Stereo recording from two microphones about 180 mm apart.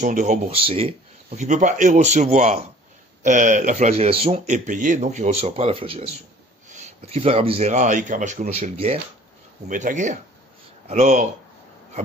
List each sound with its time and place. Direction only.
0.0 s speech: 40° right (ahead or behind)
9.7 s speech: 45° right (ahead or behind)